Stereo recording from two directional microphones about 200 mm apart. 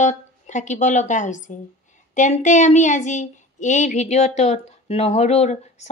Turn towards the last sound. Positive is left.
turn(degrees=35)  # may be behind; listen again after turning